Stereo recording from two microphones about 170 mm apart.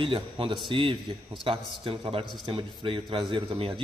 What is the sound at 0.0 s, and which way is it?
A man's voice, 30° right (ahead or behind).